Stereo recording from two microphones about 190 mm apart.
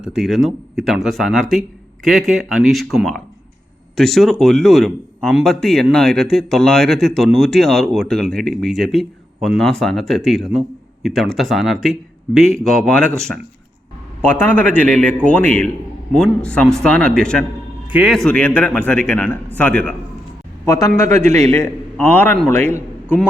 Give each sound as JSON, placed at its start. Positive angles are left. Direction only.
{"t": 0.0, "sound": "a man's voice", "side_deg": 0}
{"t": 20.7, "sound": "a man's voice", "side_deg": 20}